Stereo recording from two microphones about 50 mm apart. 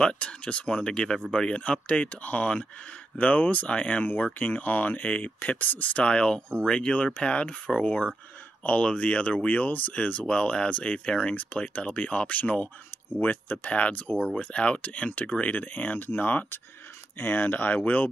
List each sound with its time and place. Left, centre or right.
0.0 s speech: left
13.7 s speech: left